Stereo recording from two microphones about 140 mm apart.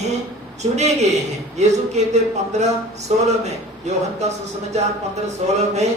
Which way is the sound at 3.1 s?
55° right (ahead or behind).